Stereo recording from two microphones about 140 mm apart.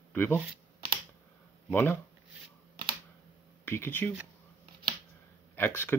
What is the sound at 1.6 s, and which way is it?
Speech, 15° left (ahead or behind).